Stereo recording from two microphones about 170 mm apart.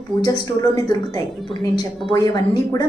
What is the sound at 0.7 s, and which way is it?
A woman's voice, 20° left (ahead or behind).